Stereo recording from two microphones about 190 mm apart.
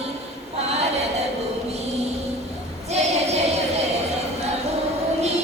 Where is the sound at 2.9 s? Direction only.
35° right (ahead or behind).